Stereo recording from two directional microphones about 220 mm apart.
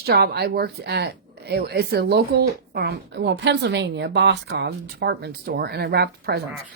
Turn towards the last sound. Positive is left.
turn(degrees=-45)  # may be behind; listen again after turning